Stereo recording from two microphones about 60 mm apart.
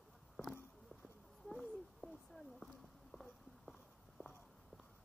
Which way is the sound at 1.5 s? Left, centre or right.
Centre.